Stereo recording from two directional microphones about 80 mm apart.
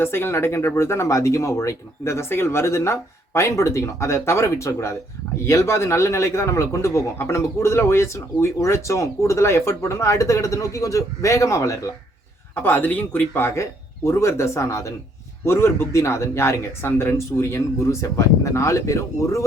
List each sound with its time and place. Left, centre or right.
0.0 s a man's voice: left
12.6 s a man's voice: left